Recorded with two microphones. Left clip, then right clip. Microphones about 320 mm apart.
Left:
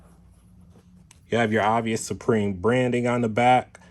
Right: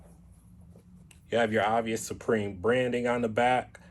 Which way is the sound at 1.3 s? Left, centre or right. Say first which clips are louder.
Left 4 dB; left.